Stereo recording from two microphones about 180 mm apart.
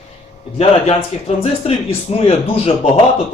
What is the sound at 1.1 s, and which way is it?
Speech, 35° left (ahead or behind).